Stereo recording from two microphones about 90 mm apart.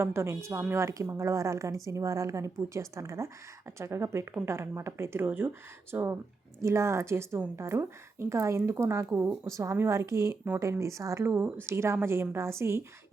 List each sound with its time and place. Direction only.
0.0 s a woman's voice: 30° right (ahead or behind)